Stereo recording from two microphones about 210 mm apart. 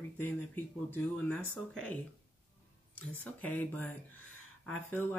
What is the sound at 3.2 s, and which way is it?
Speech, 10° left (ahead or behind).